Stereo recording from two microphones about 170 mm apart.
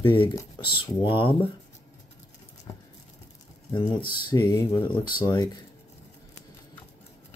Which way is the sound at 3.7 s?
25° left (ahead or behind).